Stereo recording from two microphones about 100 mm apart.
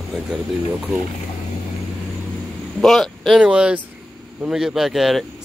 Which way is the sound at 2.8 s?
5° left (ahead or behind).